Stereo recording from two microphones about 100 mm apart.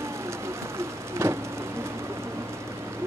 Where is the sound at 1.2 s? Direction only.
30° right (ahead or behind).